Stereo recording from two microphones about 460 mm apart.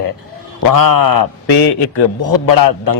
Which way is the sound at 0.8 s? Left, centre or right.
Left.